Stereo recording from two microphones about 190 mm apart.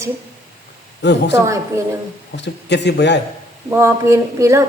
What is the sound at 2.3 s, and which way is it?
Speech, 65° left (ahead or behind).